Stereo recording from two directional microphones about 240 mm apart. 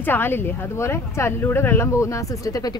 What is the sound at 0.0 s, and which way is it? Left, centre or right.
A man's voice, centre.